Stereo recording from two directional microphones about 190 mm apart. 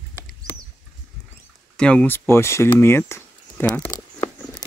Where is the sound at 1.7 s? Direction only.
5° left (ahead or behind).